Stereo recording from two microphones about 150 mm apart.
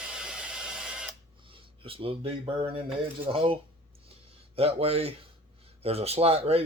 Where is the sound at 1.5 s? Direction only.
35° right (ahead or behind).